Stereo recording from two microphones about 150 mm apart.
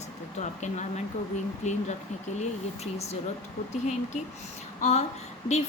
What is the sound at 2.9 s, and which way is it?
A woman's voice, 45° left (ahead or behind).